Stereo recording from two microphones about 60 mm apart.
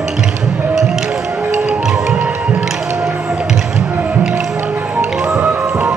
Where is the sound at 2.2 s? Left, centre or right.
Right.